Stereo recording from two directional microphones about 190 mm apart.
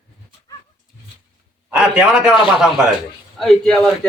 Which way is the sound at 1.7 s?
5° right (ahead or behind).